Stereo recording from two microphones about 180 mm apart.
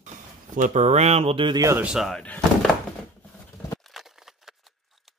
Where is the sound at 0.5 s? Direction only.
45° right (ahead or behind); by 1.8 s 20° right (ahead or behind).